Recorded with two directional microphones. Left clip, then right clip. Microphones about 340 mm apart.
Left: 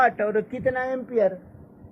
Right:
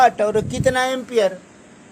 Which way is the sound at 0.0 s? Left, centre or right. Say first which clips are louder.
Right 6 dB; centre.